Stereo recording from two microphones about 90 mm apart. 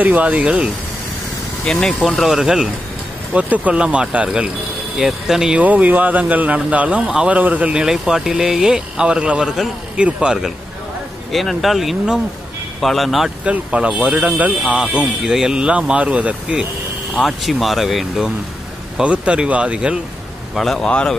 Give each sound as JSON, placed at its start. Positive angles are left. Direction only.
{"t": 0.0, "sound": "speech", "side_deg": -15}
{"t": 1.7, "sound": "speech", "side_deg": 5}
{"t": 3.3, "sound": "speech", "side_deg": -15}
{"t": 13.5, "sound": "speech", "side_deg": -10}
{"t": 17.1, "sound": "speech", "side_deg": 0}
{"t": 20.5, "sound": "speech", "side_deg": 5}